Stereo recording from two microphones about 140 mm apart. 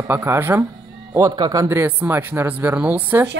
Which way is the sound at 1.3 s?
30° right (ahead or behind).